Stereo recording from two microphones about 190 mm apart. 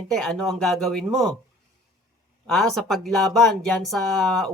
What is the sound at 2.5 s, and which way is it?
Speech, 5° left (ahead or behind).